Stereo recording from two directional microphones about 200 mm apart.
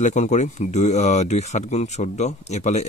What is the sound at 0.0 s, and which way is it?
Speech, 35° left (ahead or behind).